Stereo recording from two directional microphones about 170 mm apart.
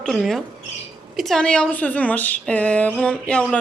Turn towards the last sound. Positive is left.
turn(degrees=10)  # may be behind; listen again after turning